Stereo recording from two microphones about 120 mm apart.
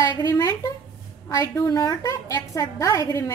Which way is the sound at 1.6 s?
30° left (ahead or behind).